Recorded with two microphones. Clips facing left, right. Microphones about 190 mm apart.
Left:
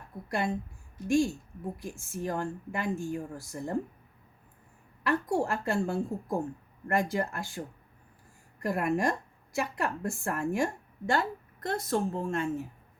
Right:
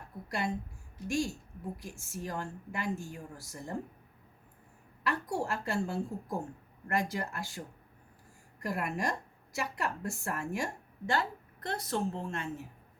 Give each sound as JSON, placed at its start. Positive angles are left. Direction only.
{"t": 1.0, "sound": "a woman's voice", "side_deg": 55}
{"t": 5.0, "sound": "a woman's voice", "side_deg": 50}
{"t": 8.6, "sound": "a woman's voice", "side_deg": 50}